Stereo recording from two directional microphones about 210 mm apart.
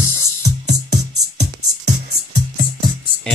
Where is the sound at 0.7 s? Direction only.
55° right (ahead or behind).